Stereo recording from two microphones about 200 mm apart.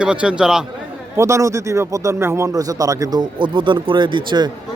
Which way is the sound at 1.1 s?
15° right (ahead or behind).